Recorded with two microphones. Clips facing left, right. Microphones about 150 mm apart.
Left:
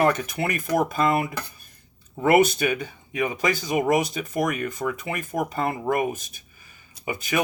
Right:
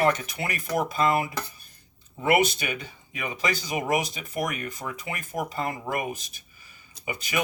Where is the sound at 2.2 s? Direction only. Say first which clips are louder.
Left 5 dB; 50° left (ahead or behind).